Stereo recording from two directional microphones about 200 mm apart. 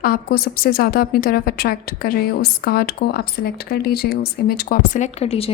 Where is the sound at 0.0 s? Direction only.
50° left (ahead or behind).